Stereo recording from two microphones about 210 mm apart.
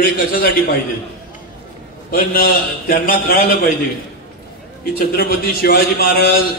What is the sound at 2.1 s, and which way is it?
A man's voice, 45° left (ahead or behind).